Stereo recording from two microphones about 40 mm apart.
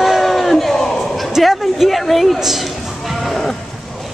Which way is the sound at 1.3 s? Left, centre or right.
Centre.